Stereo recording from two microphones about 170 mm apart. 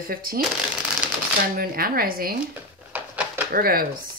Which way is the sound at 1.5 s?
60° right (ahead or behind).